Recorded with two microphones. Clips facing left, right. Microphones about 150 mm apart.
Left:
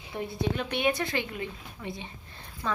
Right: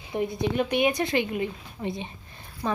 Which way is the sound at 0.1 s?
15° right (ahead or behind).